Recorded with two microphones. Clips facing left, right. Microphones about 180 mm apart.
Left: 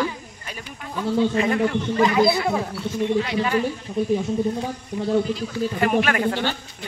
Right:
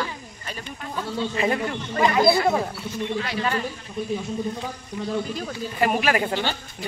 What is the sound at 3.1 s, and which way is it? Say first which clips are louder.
Speech: left 4 dB; 20° left (ahead or behind).